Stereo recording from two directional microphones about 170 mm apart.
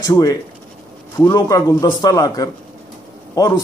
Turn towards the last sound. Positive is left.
turn(degrees=20)  # may be behind; listen again after turning